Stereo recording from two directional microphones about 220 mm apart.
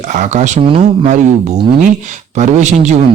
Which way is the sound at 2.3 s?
30° right (ahead or behind).